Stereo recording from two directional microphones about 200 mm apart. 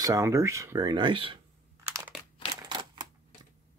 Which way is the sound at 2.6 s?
20° right (ahead or behind).